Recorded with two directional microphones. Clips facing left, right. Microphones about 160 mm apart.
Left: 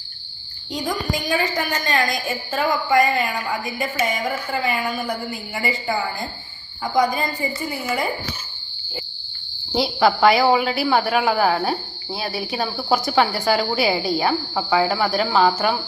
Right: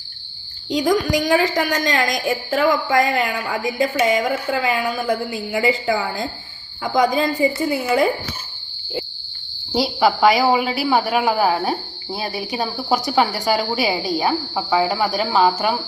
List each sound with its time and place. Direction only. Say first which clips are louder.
0.7 s a woman's voice: right 7 dB; 90° right
9.7 s speech: right 1 dB; 10° right (ahead or behind)
12.2 s speech: right 1 dB; 20° right (ahead or behind)